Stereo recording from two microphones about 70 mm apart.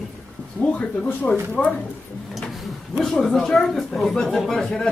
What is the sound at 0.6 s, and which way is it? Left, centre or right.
A man's voice, centre.